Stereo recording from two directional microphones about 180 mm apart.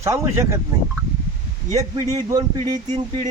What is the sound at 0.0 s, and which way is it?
Speech, 15° right (ahead or behind).